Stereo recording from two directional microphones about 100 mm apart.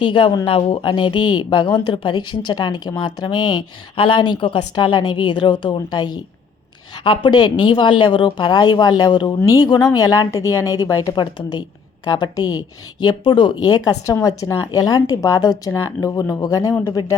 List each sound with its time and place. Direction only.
0.0 s speech: 55° left (ahead or behind)
0.4 s speech: 65° left (ahead or behind)
4.7 s speech: 45° left (ahead or behind)
7.0 s speech: 55° left (ahead or behind)
9.4 s speech: 35° left (ahead or behind)